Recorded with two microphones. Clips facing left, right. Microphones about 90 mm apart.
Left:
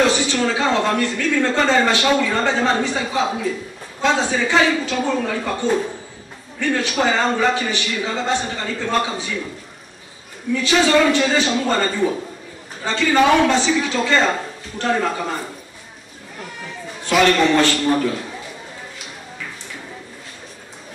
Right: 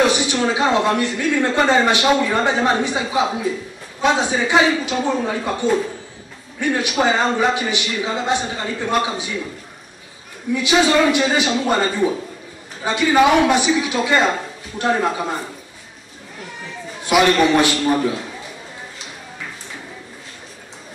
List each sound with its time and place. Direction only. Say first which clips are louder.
0.0 s speech: even; 15° right (ahead or behind)
10.5 s speech: even; 15° right (ahead or behind)
17.0 s speech: right 1 dB; 15° right (ahead or behind)